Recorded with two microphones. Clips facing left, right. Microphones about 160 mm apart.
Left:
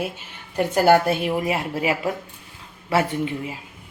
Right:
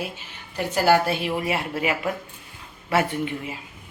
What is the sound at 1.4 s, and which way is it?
A woman's voice, 35° left (ahead or behind).